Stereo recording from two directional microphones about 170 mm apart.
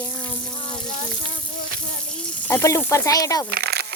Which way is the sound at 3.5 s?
70° right (ahead or behind).